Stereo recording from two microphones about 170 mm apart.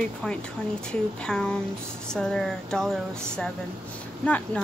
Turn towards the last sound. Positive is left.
turn(degrees=10)  # may be behind; listen again after turning